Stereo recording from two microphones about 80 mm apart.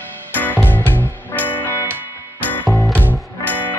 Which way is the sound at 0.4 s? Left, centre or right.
Left.